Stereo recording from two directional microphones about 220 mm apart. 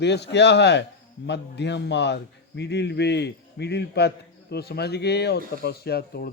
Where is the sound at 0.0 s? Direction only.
50° left (ahead or behind).